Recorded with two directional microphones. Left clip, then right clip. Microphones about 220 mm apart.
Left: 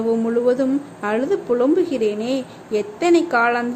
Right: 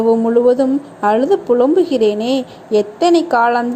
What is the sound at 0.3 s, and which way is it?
A woman's voice, 10° right (ahead or behind).